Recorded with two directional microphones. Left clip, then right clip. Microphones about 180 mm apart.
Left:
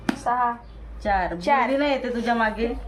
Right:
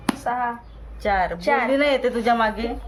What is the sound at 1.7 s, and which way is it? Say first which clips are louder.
Speech: right 4 dB; 70° right (ahead or behind).